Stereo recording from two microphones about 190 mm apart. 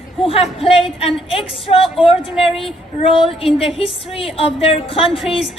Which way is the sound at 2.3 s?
Centre (ahead or behind).